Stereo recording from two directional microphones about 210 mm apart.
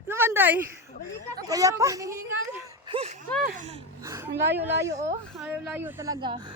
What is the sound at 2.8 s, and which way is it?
Speech, 25° right (ahead or behind).